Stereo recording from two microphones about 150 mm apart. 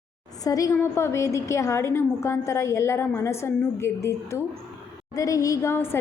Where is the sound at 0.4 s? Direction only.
20° left (ahead or behind).